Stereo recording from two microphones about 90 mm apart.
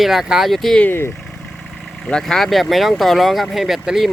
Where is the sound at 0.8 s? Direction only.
30° left (ahead or behind).